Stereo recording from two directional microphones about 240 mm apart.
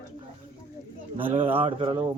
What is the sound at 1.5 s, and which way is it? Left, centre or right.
Speech, right.